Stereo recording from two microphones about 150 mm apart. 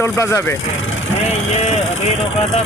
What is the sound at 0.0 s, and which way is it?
Speech, 20° left (ahead or behind).